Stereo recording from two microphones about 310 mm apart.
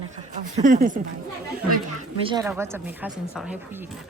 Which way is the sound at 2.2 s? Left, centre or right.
Centre.